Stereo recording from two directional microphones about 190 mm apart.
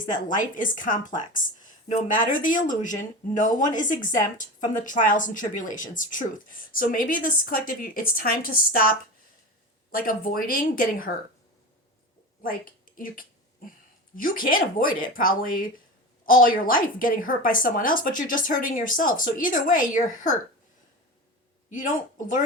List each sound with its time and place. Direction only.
0.1 s a woman's voice: 45° left (ahead or behind)
9.9 s a woman's voice: 50° left (ahead or behind)
12.4 s a woman's voice: 45° left (ahead or behind)
21.7 s speech: 40° left (ahead or behind)